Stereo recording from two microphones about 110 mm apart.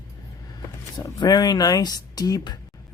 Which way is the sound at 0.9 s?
40° left (ahead or behind).